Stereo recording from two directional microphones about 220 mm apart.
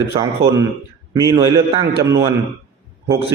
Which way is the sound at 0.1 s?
15° right (ahead or behind).